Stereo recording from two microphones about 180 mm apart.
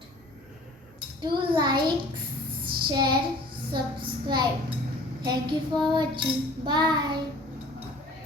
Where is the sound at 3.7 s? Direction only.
25° right (ahead or behind).